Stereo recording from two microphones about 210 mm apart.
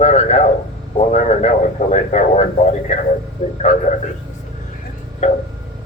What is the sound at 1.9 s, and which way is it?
Speech, 35° left (ahead or behind).